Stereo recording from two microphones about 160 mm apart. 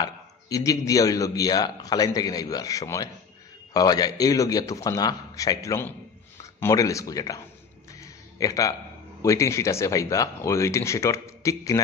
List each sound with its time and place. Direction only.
0.0 s speech: 20° left (ahead or behind)
8.0 s a sound: 20° left (ahead or behind)
9.2 s speech: 20° left (ahead or behind)